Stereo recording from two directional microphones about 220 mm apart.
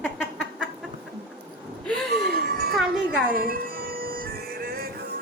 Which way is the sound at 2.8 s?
5° right (ahead or behind).